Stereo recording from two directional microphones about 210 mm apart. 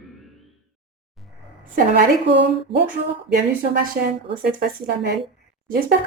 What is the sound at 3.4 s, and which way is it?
A woman's voice, 40° right (ahead or behind).